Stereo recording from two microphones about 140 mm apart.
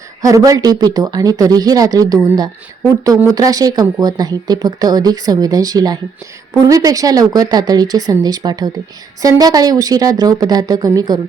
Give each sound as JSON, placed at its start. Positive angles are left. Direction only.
{"t": 0.2, "sound": "speech", "side_deg": -25}